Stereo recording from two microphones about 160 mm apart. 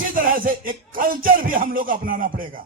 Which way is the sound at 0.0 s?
60° right (ahead or behind).